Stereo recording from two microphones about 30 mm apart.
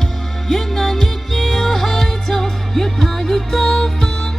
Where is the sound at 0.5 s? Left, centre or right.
Centre.